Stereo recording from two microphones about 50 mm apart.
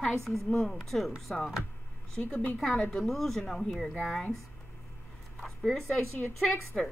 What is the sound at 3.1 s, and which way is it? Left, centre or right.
Speech, centre.